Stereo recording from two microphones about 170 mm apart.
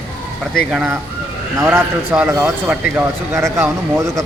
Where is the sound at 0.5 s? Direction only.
5° right (ahead or behind).